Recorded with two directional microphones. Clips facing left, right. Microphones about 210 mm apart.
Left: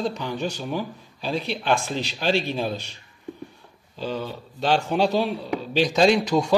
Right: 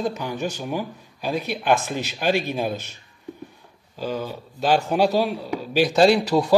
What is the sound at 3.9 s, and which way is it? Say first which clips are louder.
Speech: right 1 dB; 10° right (ahead or behind).